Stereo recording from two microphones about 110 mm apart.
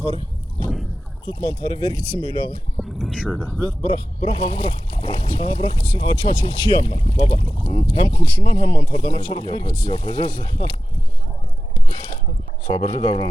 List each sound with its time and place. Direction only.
1.3 s speech: 45° left (ahead or behind)
2.7 s a sound: centre (ahead or behind)
3.2 s speech: 30° left (ahead or behind)
3.8 s speech: 50° left (ahead or behind)
12.6 s speech: 45° left (ahead or behind)